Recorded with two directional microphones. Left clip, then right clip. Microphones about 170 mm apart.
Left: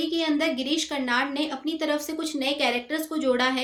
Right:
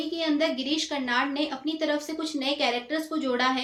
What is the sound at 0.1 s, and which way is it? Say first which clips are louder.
A woman's voice: left 1 dB; 40° left (ahead or behind).